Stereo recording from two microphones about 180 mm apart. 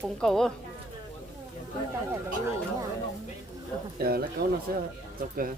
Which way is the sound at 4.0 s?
60° right (ahead or behind).